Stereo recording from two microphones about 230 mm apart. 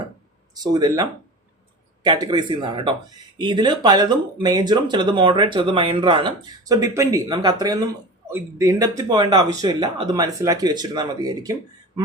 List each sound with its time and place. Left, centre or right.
0.5 s speech: centre
2.0 s speech: centre